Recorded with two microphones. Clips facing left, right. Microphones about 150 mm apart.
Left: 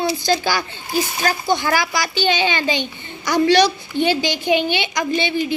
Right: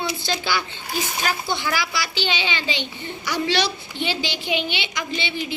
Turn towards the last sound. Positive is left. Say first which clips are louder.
# left 8 dB
turn(degrees=45)  # may be behind; listen again after turning